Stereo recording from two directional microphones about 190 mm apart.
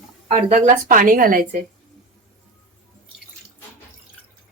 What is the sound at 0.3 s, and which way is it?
Speech, 35° right (ahead or behind).